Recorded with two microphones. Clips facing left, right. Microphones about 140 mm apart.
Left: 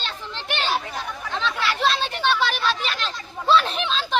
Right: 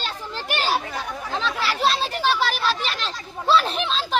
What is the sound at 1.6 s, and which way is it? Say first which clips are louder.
Children playing: even; 5° right (ahead or behind).